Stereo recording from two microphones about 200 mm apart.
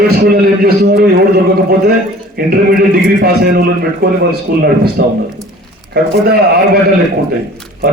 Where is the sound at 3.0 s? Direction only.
55° right (ahead or behind).